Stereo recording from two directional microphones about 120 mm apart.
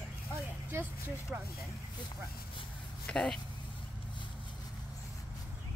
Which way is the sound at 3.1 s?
5° left (ahead or behind).